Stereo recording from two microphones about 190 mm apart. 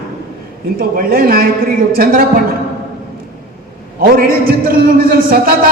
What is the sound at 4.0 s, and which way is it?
A man's voice, 50° right (ahead or behind).